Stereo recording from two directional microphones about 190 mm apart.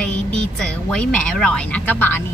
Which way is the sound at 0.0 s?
5° left (ahead or behind).